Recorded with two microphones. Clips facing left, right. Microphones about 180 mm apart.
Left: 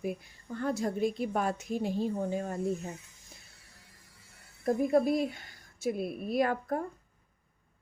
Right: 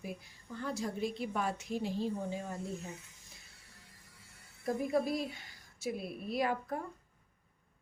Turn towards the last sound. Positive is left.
turn(degrees=50)  # may be behind; listen again after turning